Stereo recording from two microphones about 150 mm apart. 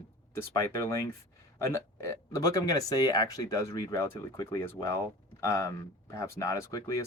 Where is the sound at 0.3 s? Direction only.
20° left (ahead or behind).